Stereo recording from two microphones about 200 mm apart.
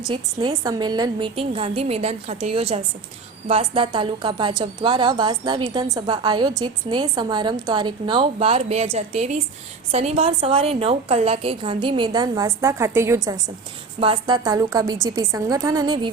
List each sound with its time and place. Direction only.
0.1 s a woman's voice: 20° right (ahead or behind)